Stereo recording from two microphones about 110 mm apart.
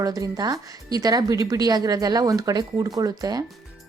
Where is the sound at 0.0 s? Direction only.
35° right (ahead or behind).